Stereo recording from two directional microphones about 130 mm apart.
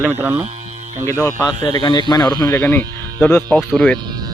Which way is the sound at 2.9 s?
30° right (ahead or behind).